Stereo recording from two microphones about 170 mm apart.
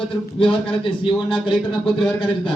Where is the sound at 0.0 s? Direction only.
30° left (ahead or behind).